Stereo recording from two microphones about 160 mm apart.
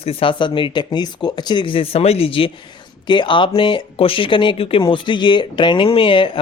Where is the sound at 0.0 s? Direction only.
35° left (ahead or behind).